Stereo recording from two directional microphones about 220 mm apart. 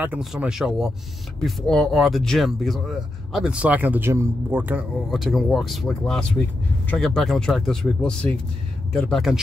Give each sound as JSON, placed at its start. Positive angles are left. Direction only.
{"t": 0.0, "sound": "speech", "side_deg": -5}